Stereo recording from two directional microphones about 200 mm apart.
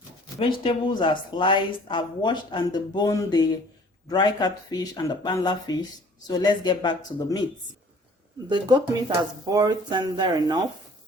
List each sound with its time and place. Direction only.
0.3 s speech: 25° left (ahead or behind)
8.4 s speech: 20° right (ahead or behind)